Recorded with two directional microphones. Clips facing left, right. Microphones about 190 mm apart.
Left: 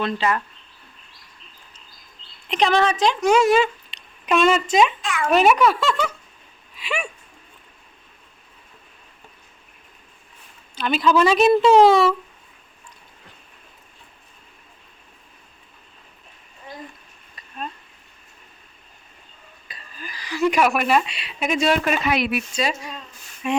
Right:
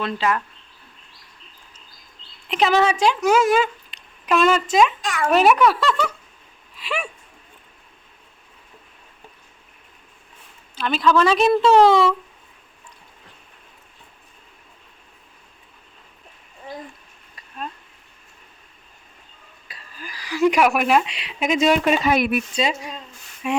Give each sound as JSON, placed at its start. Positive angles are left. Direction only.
{"t": 0.0, "sound": "a woman's voice", "side_deg": 0}
{"t": 2.5, "sound": "speech", "side_deg": -5}
{"t": 5.0, "sound": "a child's voice", "side_deg": -40}
{"t": 5.3, "sound": "a woman's voice", "side_deg": 0}
{"t": 6.7, "sound": "a sound", "side_deg": 0}
{"t": 10.8, "sound": "a woman's voice", "side_deg": 5}
{"t": 19.6, "sound": "speech", "side_deg": -5}
{"t": 22.0, "sound": "speech", "side_deg": -50}
{"t": 23.4, "sound": "a woman's voice", "side_deg": -5}